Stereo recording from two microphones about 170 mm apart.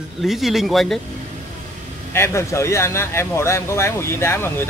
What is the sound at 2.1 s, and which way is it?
Speech, 15° left (ahead or behind).